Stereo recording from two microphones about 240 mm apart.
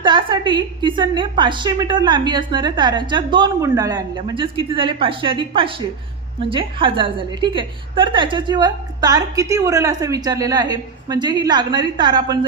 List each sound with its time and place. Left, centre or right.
0.0 s a woman's voice: centre